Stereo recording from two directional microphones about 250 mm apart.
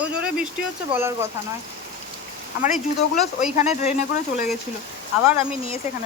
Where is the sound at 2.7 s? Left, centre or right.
Left.